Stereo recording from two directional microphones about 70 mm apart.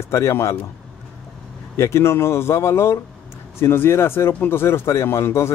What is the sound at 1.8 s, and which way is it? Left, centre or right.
Speech, left.